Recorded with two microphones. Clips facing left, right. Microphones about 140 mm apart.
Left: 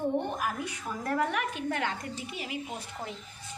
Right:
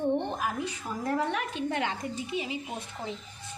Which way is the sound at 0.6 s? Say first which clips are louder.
Right 2 dB; 25° right (ahead or behind).